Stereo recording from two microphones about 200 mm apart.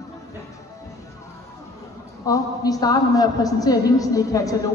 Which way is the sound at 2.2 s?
20° left (ahead or behind).